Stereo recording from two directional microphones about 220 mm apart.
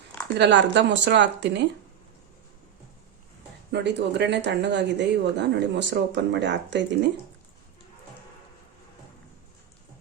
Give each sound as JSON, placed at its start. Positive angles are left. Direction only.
{"t": 0.3, "sound": "speech", "side_deg": -50}
{"t": 3.7, "sound": "speech", "side_deg": -50}